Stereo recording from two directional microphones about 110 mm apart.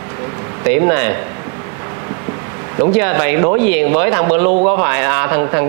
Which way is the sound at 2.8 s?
20° right (ahead or behind).